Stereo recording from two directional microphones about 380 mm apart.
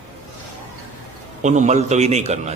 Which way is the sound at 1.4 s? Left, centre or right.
Centre.